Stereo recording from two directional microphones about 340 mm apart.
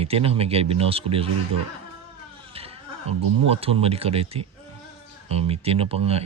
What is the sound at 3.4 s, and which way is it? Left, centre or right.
Speech, centre.